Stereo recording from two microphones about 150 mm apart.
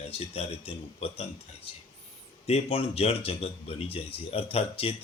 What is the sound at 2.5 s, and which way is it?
A man's voice, 40° left (ahead or behind).